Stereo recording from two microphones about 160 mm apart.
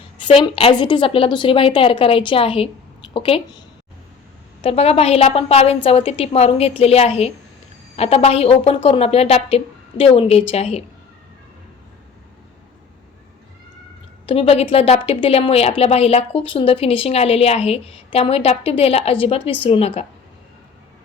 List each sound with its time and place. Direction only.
0.2 s a woman's voice: 30° left (ahead or behind)
4.6 s a woman's voice: 40° left (ahead or behind)
14.3 s a woman's voice: 35° left (ahead or behind)